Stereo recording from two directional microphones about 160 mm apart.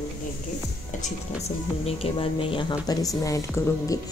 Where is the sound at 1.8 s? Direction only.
35° left (ahead or behind); by 3.4 s 20° left (ahead or behind).